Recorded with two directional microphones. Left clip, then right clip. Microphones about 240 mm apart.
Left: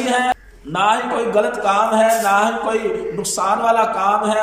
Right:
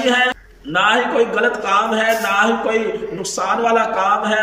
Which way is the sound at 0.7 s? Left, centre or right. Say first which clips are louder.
Right 2 dB; left.